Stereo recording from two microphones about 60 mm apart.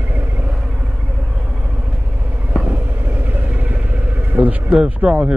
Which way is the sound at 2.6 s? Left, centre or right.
Right.